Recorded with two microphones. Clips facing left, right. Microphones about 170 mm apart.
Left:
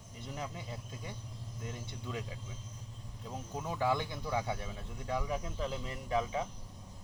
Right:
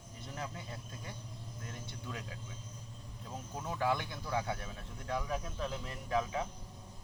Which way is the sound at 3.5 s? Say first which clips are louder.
Left 1 dB; 15° left (ahead or behind).